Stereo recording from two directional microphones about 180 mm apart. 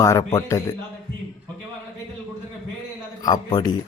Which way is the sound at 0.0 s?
15° left (ahead or behind).